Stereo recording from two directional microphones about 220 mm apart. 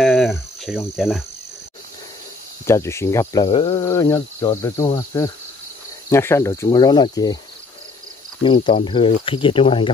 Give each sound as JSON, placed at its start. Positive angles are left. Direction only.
{"t": 0.0, "sound": "cricket", "side_deg": 0}
{"t": 2.6, "sound": "speech", "side_deg": 10}
{"t": 3.4, "sound": "speech", "side_deg": 25}
{"t": 3.7, "sound": "speech", "side_deg": 15}
{"t": 8.4, "sound": "speech", "side_deg": 20}